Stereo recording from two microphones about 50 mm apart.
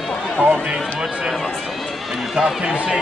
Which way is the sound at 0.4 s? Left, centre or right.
Centre.